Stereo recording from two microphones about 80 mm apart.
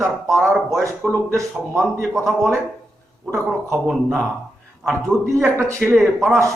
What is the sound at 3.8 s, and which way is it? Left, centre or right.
A man's voice, centre.